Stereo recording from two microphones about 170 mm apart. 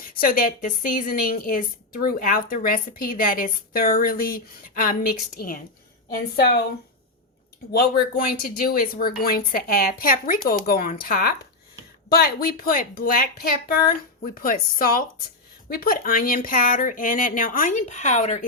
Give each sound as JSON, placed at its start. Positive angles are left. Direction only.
{"t": 0.1, "sound": "a woman's voice", "side_deg": 55}
{"t": 6.1, "sound": "a woman's voice", "side_deg": 70}
{"t": 7.7, "sound": "a woman's voice", "side_deg": 65}